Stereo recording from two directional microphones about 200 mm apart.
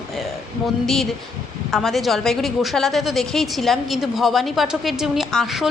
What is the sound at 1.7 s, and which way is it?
A woman's voice, centre (ahead or behind).